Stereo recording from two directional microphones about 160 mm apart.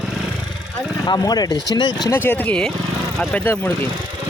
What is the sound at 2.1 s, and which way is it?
Speech, 15° left (ahead or behind).